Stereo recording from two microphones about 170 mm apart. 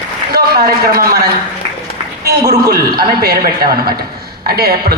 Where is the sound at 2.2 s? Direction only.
70° right (ahead or behind).